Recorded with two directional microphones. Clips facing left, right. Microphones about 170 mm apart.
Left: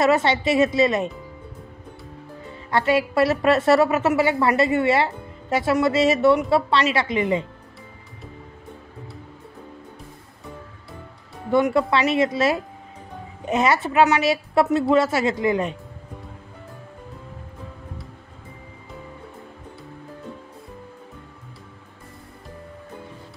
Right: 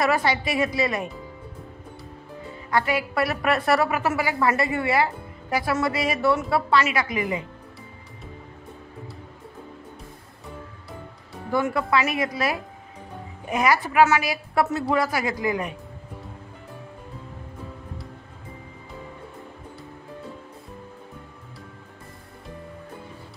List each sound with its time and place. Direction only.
0.0 s a woman's voice: 25° left (ahead or behind)
2.7 s a woman's voice: 25° left (ahead or behind)
11.5 s a woman's voice: 25° left (ahead or behind)